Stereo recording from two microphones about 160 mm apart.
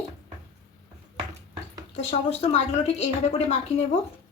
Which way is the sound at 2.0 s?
45° left (ahead or behind).